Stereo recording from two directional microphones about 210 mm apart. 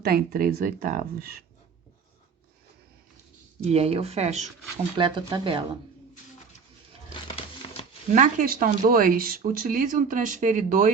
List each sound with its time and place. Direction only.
0.0 s speech: 45° right (ahead or behind)
3.6 s speech: 30° right (ahead or behind)
7.1 s a sound: 25° left (ahead or behind)
8.1 s speech: 40° right (ahead or behind)